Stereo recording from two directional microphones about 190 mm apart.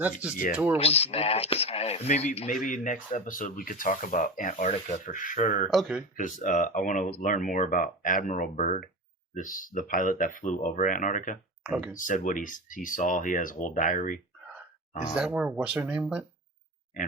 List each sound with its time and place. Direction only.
0.0 s speech: 5° right (ahead or behind)
0.8 s speech: 30° left (ahead or behind)
11.6 s speech: 5° right (ahead or behind)
11.9 s speech: 40° left (ahead or behind)
15.1 s speech: 5° right (ahead or behind)